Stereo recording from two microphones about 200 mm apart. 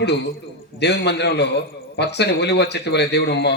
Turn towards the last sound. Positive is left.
turn(degrees=55)  # may be behind; listen again after turning